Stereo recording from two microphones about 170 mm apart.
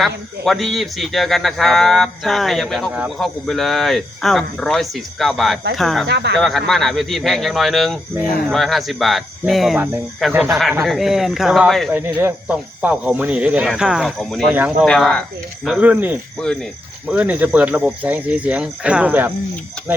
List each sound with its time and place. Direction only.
0.0 s speech: centre (ahead or behind)
6.1 s speech: 90° right
6.3 s speech: centre (ahead or behind)
11.9 s speech: 10° right (ahead or behind)
14.5 s speech: 10° right (ahead or behind)
14.8 s speech: 5° left (ahead or behind)
16.4 s speech: 5° left (ahead or behind)
17.1 s speech: 10° right (ahead or behind)